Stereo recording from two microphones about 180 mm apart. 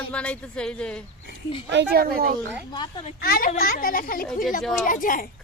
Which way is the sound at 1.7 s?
65° right (ahead or behind).